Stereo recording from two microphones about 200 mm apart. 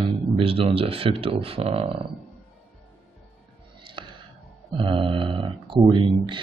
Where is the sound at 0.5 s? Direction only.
30° right (ahead or behind).